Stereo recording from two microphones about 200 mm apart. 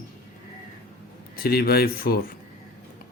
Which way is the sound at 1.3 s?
50° left (ahead or behind).